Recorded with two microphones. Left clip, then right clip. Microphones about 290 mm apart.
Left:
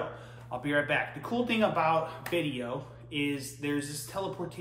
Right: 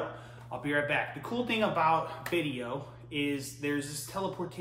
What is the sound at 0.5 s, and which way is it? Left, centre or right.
Speech, centre.